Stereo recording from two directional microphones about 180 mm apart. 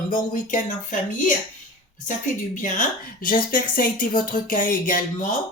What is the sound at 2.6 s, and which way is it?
A woman's voice, 50° left (ahead or behind).